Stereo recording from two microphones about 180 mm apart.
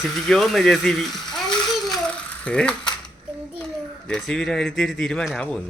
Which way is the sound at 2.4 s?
5° left (ahead or behind).